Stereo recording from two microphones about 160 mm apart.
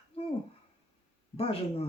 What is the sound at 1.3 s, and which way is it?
Speech, 35° left (ahead or behind).